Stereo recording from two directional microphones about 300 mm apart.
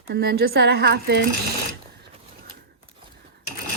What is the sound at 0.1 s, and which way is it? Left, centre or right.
Speech, right.